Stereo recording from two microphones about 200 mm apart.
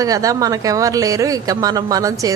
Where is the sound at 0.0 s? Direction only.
15° right (ahead or behind).